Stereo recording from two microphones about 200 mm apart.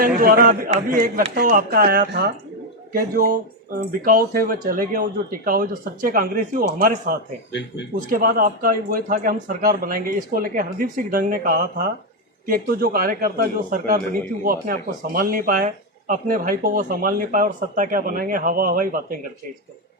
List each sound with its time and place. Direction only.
0.2 s a man's voice: 45° right (ahead or behind)